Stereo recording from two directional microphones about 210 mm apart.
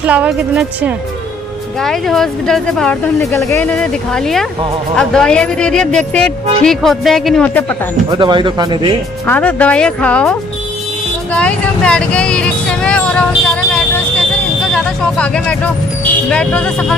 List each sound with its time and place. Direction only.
0.0 s a woman's voice: 5° right (ahead or behind)
8.1 s speech: 20° right (ahead or behind)
9.2 s speech: 10° left (ahead or behind)
11.3 s vehicle: 5° left (ahead or behind)
14.7 s speech: 5° left (ahead or behind)